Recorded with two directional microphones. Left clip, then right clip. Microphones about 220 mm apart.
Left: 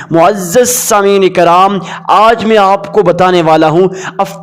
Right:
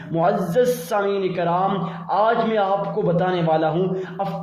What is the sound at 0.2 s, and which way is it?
A woman's voice, 45° left (ahead or behind).